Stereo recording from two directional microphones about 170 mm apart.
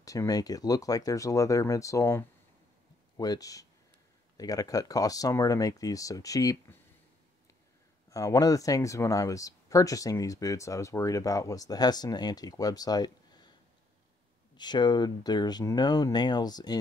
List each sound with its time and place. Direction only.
0.0 s speech: 20° left (ahead or behind)
8.1 s speech: 20° left (ahead or behind)
14.6 s speech: 25° left (ahead or behind)